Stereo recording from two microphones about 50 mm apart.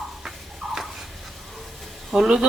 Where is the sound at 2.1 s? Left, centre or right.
Centre.